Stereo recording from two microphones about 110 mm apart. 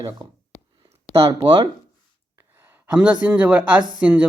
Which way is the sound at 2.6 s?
20° right (ahead or behind).